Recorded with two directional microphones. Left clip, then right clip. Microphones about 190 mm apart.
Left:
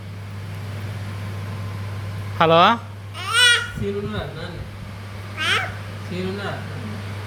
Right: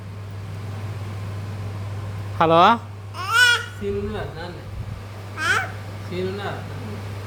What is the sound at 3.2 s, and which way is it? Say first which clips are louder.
Babbling: left 1 dB; 25° right (ahead or behind).